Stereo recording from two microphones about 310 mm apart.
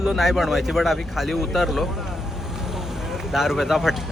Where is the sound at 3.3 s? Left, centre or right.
Centre.